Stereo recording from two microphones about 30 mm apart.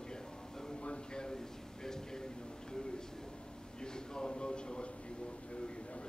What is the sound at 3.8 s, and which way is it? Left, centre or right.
A man's voice, left.